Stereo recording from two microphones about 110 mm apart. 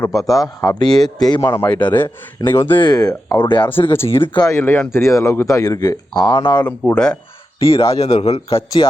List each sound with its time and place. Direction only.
0.1 s speech: 30° left (ahead or behind)
1.5 s speech: 15° left (ahead or behind)
2.7 s speech: 40° left (ahead or behind)
3.7 s speech: 20° left (ahead or behind); by 6.7 s 45° left (ahead or behind)
6.7 s speech: 10° left (ahead or behind)
7.6 s a man's voice: 60° left (ahead or behind)
8.8 s speech: 45° left (ahead or behind)